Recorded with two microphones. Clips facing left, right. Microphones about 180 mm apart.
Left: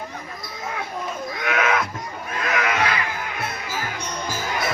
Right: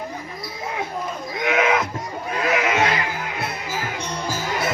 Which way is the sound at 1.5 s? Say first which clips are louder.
Right 3 dB; 20° right (ahead or behind).